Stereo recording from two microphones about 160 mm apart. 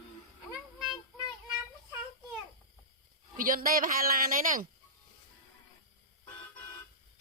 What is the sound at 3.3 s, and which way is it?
A man's voice, 60° right (ahead or behind).